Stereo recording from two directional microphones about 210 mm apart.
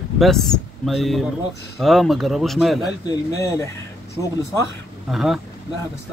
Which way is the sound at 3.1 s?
15° left (ahead or behind).